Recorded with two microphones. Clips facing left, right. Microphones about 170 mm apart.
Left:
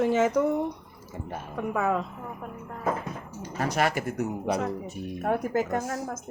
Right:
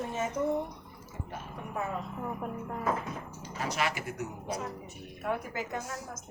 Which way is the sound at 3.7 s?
50° left (ahead or behind).